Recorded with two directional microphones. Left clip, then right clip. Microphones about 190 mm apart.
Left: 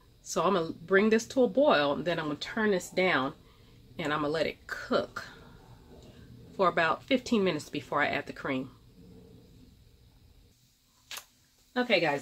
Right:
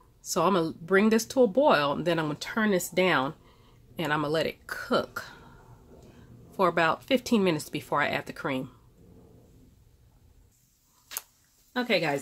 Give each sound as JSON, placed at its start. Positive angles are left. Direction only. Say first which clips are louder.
{"t": 0.3, "sound": "speech", "louder": "right 3 dB", "side_deg": -35}
{"t": 6.5, "sound": "speech", "louder": "right 2 dB", "side_deg": -40}
{"t": 11.7, "sound": "a woman's voice", "louder": "even", "side_deg": -50}